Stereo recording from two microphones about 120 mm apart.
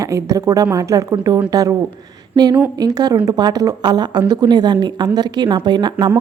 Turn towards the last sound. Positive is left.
turn(degrees=-40)  # may be behind; listen again after turning